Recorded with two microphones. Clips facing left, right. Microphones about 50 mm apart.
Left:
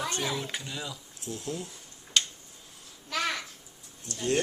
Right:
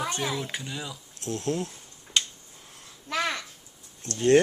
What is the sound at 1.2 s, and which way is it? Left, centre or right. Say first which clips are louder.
Speech: right 7 dB; right.